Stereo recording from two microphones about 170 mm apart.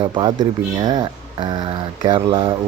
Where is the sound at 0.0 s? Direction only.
30° right (ahead or behind).